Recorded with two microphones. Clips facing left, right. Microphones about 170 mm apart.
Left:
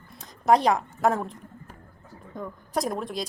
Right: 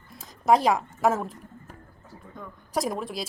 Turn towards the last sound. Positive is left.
turn(degrees=0)  # may be behind; listen again after turning